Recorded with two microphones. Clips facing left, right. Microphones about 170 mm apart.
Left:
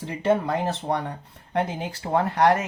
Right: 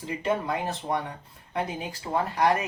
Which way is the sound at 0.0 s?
70° left (ahead or behind).